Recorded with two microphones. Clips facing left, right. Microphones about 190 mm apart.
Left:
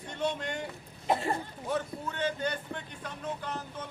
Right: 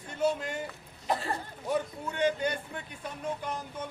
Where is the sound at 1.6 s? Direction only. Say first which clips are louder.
Right 2 dB; 15° right (ahead or behind).